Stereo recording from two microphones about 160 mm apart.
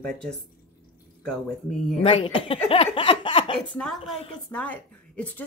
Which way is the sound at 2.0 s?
40° left (ahead or behind).